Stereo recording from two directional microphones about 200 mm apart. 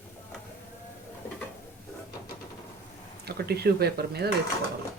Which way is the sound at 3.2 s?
50° right (ahead or behind).